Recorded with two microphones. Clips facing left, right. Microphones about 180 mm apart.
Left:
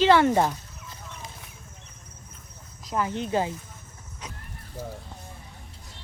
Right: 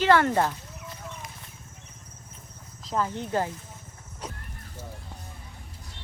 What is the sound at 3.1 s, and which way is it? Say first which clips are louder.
Speech: left 2 dB; 20° left (ahead or behind).